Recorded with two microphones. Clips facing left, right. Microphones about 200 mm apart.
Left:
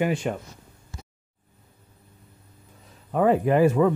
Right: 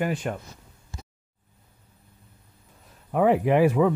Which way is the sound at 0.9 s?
25° right (ahead or behind).